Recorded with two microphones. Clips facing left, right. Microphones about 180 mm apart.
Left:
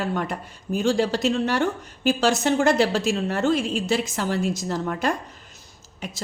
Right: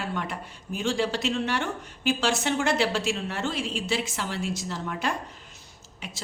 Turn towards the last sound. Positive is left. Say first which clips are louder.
# left 6 dB
turn(degrees=40)  # may be behind; listen again after turning